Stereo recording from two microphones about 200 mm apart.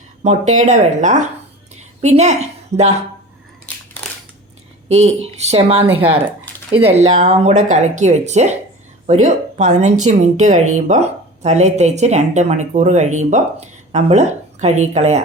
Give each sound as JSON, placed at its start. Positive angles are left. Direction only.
{"t": 0.2, "sound": "a woman's voice", "side_deg": -35}
{"t": 4.9, "sound": "speech", "side_deg": -35}